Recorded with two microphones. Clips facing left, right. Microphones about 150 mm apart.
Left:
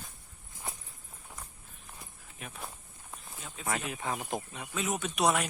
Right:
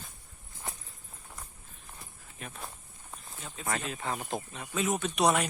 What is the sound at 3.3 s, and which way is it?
Speech, centre (ahead or behind).